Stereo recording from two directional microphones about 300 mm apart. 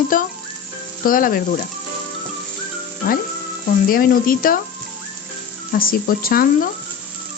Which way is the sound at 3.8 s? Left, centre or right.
Left.